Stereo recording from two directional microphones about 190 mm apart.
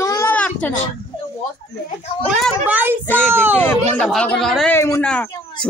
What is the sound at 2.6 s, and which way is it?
Child singing, 10° right (ahead or behind).